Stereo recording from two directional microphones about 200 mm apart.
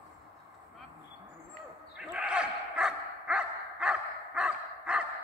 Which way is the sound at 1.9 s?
5° right (ahead or behind).